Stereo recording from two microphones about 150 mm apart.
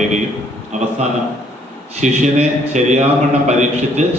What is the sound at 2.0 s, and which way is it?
A man's voice, 50° right (ahead or behind).